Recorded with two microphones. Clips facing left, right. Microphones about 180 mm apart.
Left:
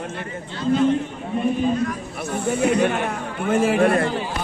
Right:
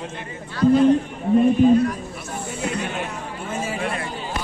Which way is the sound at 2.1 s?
65° left (ahead or behind).